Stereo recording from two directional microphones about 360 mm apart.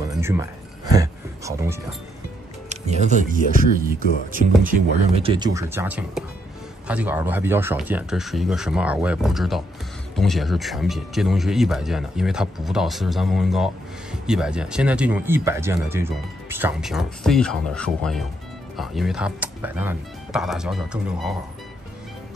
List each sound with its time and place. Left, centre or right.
0.0 s music: centre
2.7 s music: centre
3.1 s speech: left
4.3 s speech: right; by 21.4 s centre